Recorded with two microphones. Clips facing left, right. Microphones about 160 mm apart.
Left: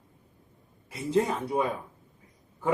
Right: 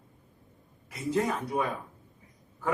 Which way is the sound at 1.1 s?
25° left (ahead or behind).